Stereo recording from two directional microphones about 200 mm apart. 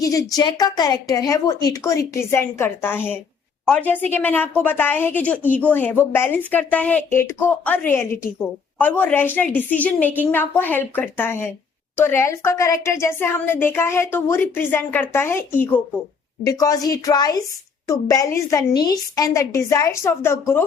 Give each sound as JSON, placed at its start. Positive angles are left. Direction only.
{"t": 0.0, "sound": "a woman's voice", "side_deg": 15}